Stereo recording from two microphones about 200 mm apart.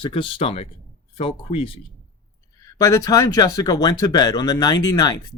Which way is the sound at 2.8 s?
15° left (ahead or behind).